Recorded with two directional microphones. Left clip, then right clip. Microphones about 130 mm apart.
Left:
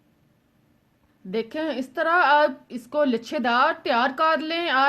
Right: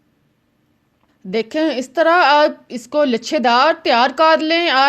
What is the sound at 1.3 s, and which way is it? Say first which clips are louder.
A woman's voice: right 9 dB; 45° right (ahead or behind).